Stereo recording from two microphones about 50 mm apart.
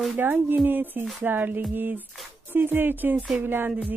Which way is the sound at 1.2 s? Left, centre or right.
Right.